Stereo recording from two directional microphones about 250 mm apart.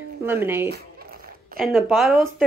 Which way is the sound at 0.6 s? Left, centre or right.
Right.